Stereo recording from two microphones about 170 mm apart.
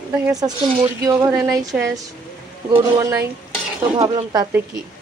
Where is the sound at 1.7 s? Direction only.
5° right (ahead or behind).